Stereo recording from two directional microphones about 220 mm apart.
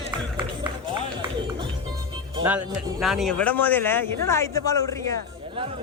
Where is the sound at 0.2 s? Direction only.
20° right (ahead or behind).